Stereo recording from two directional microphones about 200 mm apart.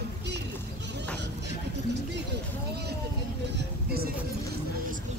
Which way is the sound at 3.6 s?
50° right (ahead or behind).